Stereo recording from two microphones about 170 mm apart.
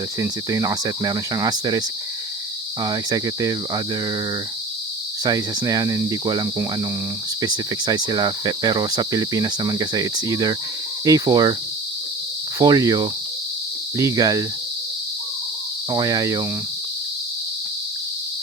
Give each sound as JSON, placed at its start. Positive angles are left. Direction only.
{"t": 0.2, "sound": "cricket", "side_deg": -20}
{"t": 2.8, "sound": "cricket", "side_deg": -20}
{"t": 5.2, "sound": "cricket", "side_deg": -25}
{"t": 12.5, "sound": "cricket", "side_deg": -20}
{"t": 15.9, "sound": "cricket", "side_deg": -20}